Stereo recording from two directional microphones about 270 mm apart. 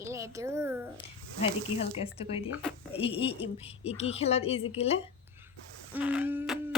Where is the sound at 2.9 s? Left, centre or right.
Centre.